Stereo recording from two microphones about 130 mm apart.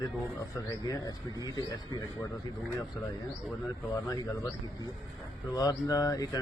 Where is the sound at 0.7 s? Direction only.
25° left (ahead or behind).